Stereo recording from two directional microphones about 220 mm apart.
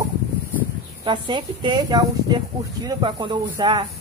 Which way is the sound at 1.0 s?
20° right (ahead or behind).